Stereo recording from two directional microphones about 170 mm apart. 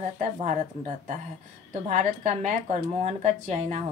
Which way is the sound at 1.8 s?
45° right (ahead or behind).